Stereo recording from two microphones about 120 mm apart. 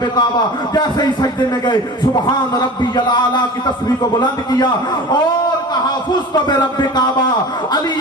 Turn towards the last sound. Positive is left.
turn(degrees=35)  # may be behind; listen again after turning